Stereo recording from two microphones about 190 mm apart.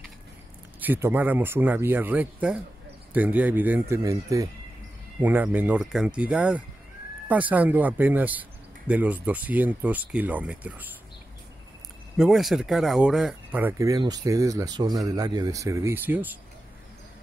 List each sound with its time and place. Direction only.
0.7 s speech: 10° right (ahead or behind)
12.2 s speech: centre (ahead or behind)